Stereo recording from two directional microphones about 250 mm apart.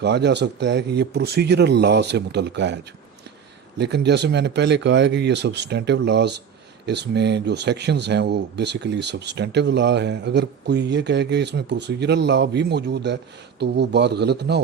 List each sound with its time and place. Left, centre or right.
0.0 s speech: right